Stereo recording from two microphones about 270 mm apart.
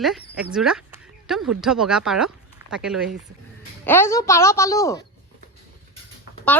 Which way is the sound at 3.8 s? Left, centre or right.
Centre.